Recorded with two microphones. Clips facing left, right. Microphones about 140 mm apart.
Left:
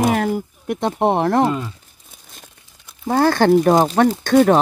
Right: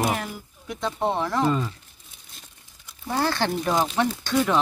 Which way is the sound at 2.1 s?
50° left (ahead or behind).